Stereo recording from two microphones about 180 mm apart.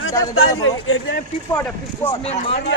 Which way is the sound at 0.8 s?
90° left.